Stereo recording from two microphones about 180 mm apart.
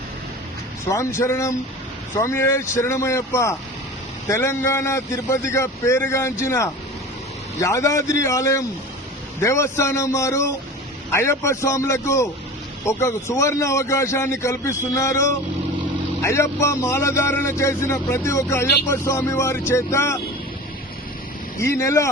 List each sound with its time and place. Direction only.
0.9 s speech: 15° left (ahead or behind)
21.6 s speech: 15° left (ahead or behind)